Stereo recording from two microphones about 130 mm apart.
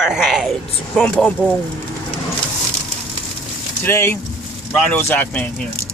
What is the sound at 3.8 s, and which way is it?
Speech, 20° left (ahead or behind).